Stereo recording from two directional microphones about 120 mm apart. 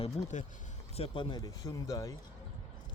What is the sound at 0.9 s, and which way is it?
Speech, 50° left (ahead or behind).